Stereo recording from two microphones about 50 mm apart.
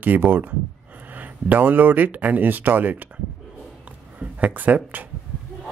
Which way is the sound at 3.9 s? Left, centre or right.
Right.